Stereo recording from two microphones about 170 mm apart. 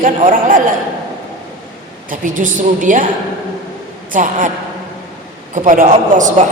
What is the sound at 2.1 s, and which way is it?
Speech, 50° right (ahead or behind).